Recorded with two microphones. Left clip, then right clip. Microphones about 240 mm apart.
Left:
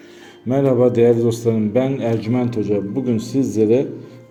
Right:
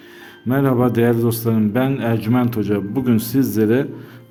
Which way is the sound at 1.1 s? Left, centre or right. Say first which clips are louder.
Left 2 dB; right.